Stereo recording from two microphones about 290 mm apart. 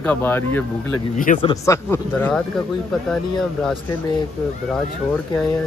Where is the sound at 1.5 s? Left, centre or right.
Centre.